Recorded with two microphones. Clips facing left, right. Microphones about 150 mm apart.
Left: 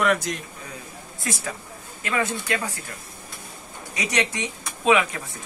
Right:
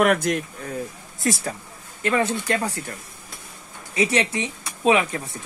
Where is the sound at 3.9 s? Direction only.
30° right (ahead or behind).